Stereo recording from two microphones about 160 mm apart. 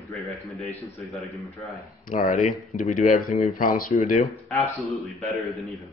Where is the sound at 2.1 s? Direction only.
55° left (ahead or behind).